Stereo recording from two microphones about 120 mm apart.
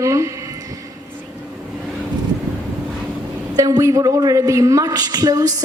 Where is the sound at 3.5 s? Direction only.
30° right (ahead or behind).